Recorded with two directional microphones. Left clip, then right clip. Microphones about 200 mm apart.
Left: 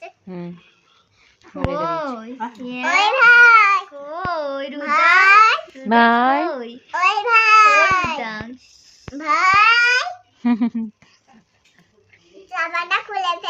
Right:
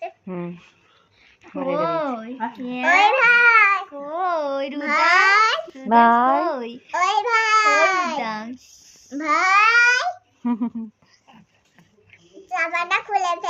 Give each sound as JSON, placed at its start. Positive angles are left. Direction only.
{"t": 0.3, "sound": "a child's voice", "side_deg": 10}
{"t": 1.7, "sound": "a child's voice", "side_deg": 45}
{"t": 4.4, "sound": "a sound", "side_deg": 0}
{"t": 4.8, "sound": "babbling", "side_deg": 10}
{"t": 5.9, "sound": "speech", "side_deg": 15}
{"t": 6.4, "sound": "babbling", "side_deg": -5}
{"t": 6.9, "sound": "babbling", "side_deg": 10}
{"t": 8.2, "sound": "babbling", "side_deg": 0}
{"t": 10.4, "sound": "speech", "side_deg": 35}
{"t": 12.3, "sound": "a child's voice", "side_deg": 10}